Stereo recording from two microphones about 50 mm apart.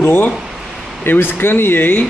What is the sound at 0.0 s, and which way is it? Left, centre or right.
Speech, left.